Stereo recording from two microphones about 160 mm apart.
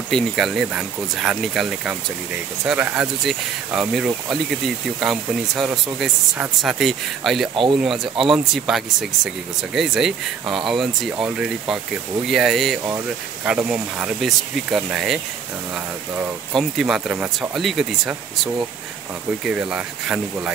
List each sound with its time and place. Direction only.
0.1 s speech: centre (ahead or behind)
16.5 s speech: centre (ahead or behind)